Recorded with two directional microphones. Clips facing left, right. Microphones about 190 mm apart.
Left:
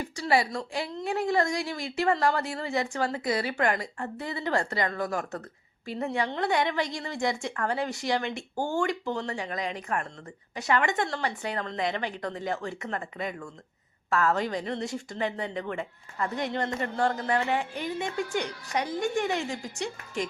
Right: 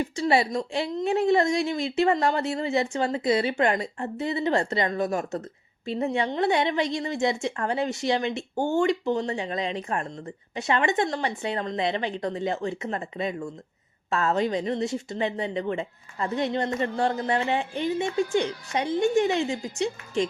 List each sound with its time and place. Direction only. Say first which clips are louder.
0.0 s a woman's voice: right 3 dB; 25° right (ahead or behind)